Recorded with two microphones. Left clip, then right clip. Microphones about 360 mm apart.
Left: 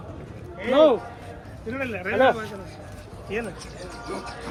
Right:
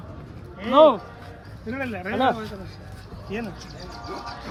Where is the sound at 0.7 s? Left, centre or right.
Right.